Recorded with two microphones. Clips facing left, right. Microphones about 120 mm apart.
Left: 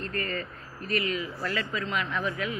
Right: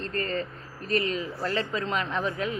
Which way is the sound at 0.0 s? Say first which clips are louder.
Right 3 dB; 30° right (ahead or behind).